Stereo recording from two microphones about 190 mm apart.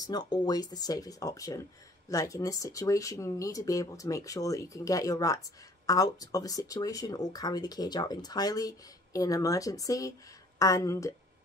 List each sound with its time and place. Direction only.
0.0 s speech: 20° left (ahead or behind)